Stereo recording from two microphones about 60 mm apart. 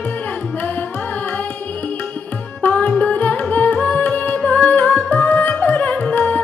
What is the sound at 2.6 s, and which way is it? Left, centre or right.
Music, left.